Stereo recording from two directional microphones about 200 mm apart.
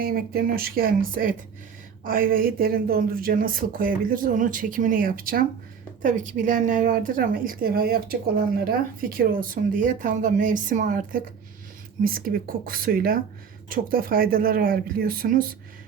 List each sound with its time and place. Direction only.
0.0 s speech: 50° right (ahead or behind)